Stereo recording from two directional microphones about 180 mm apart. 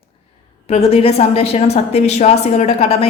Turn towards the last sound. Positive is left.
turn(degrees=35)  # may be behind; listen again after turning